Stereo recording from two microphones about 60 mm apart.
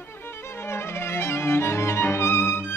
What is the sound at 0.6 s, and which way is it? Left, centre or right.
Violin, left.